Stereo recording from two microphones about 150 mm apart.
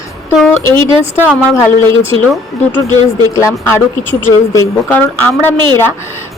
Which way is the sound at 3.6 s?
20° left (ahead or behind).